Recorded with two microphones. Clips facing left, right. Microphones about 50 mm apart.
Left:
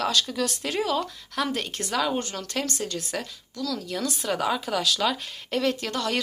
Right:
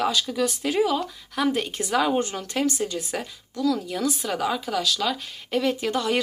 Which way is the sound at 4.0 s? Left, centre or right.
Centre.